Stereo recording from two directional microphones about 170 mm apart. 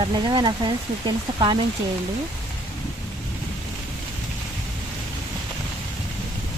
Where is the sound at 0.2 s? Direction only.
25° right (ahead or behind).